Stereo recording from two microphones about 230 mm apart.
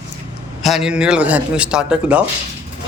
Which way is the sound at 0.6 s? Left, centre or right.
Centre.